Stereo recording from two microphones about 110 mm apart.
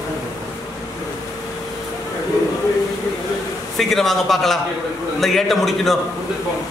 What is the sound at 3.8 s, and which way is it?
A man's voice, centre (ahead or behind).